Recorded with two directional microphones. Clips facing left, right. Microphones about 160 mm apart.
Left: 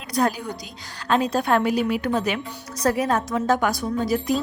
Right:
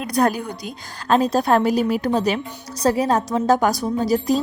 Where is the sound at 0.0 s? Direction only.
55° right (ahead or behind).